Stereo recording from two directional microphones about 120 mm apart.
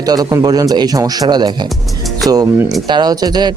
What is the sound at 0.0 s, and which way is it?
Speech, 30° right (ahead or behind).